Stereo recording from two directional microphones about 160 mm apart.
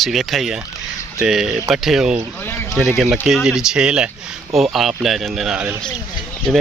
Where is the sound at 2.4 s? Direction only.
15° left (ahead or behind).